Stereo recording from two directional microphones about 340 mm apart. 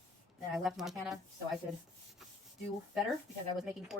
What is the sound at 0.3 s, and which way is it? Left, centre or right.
Speech, centre.